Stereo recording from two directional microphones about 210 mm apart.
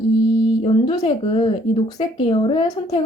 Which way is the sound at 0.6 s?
25° left (ahead or behind).